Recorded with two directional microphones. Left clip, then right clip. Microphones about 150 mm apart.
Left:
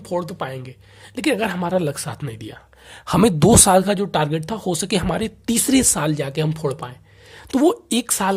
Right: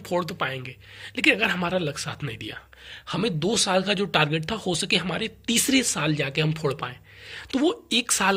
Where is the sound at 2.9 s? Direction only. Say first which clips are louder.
Left 10 dB; 70° left (ahead or behind).